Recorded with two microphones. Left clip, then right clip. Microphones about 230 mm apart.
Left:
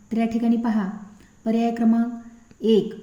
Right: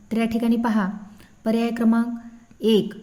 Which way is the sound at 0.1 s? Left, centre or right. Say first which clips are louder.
Even; right.